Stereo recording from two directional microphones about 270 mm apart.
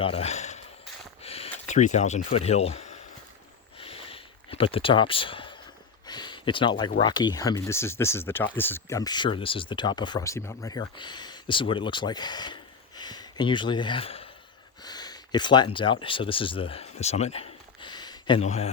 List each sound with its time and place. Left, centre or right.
0.0 s speech: left
1.2 s a sound: left
7.0 s speech: centre